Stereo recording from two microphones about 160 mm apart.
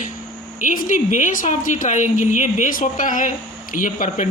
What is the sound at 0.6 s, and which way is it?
A woman's voice, 55° left (ahead or behind).